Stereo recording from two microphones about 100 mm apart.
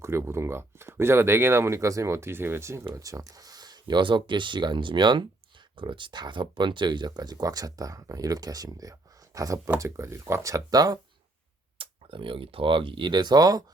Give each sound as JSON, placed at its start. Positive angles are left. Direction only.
{"t": 0.0, "sound": "speech", "side_deg": -25}
{"t": 11.8, "sound": "speech", "side_deg": -65}